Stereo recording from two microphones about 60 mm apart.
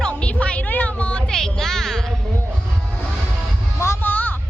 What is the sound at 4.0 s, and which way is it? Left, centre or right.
Music, left.